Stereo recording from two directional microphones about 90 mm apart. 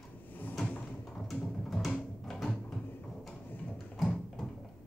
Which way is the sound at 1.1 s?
5° left (ahead or behind).